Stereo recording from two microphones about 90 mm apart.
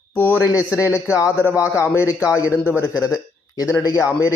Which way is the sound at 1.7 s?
30° left (ahead or behind).